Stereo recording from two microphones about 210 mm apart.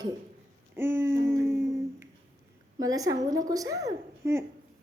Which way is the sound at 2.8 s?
15° right (ahead or behind).